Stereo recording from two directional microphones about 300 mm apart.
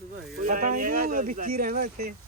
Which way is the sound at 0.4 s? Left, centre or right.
Right.